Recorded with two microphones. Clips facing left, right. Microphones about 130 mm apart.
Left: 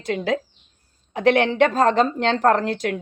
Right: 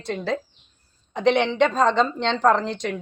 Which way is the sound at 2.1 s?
50° left (ahead or behind).